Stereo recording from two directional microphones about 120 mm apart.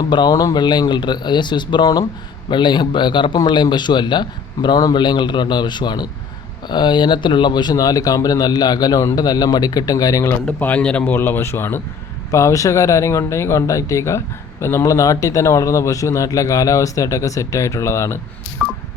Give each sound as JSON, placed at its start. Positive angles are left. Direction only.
{"t": 0.1, "sound": "speech", "side_deg": 35}
{"t": 10.4, "sound": "a man's voice", "side_deg": 10}
{"t": 18.6, "sound": "telephone dialing", "side_deg": -5}